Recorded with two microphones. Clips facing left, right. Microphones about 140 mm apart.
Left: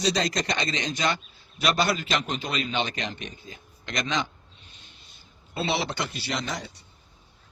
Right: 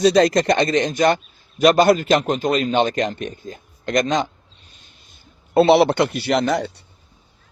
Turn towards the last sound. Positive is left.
turn(degrees=-65)  # may be behind; listen again after turning